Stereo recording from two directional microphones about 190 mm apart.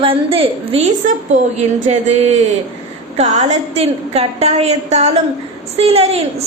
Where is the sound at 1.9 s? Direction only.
35° right (ahead or behind).